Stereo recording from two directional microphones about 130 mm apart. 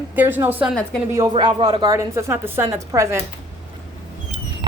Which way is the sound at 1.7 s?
30° right (ahead or behind).